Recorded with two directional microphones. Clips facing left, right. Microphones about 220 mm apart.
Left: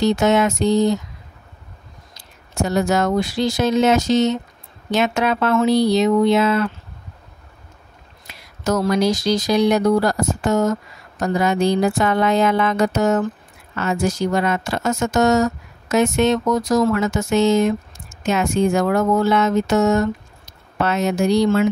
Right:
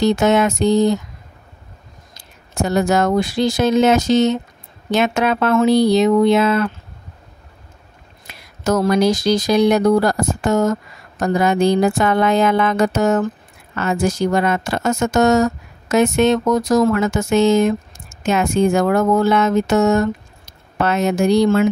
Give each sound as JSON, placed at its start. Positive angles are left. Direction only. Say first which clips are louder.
{"t": 0.0, "sound": "a woman's voice", "louder": "right 2 dB", "side_deg": -50}
{"t": 2.1, "sound": "a woman's voice", "louder": "right 1 dB", "side_deg": -50}
{"t": 8.3, "sound": "a woman's voice", "louder": "right 2 dB", "side_deg": -50}